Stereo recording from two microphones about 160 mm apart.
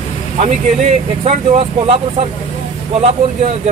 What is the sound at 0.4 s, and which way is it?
A man's voice, 40° right (ahead or behind).